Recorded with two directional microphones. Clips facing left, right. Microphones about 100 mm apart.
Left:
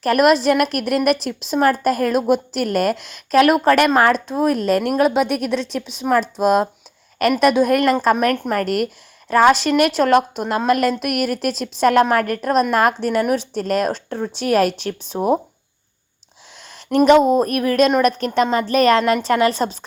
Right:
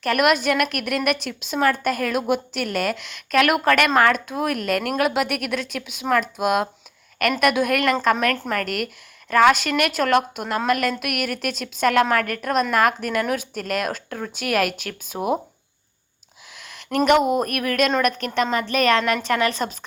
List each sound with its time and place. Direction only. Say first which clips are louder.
0.0 s a woman's voice: left 5 dB; 35° left (ahead or behind)
8.1 s a woman's voice: left 4 dB; 20° left (ahead or behind)
8.6 s a woman's voice: left 7 dB; 40° left (ahead or behind)
16.6 s a sound: left 6 dB; 35° left (ahead or behind)
17.1 s a woman's voice: left 5 dB; 30° left (ahead or behind)